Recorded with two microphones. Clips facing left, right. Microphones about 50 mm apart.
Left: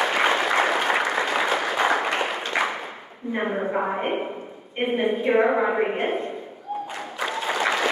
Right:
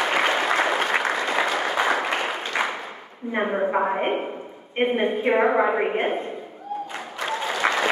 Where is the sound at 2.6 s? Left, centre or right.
Centre.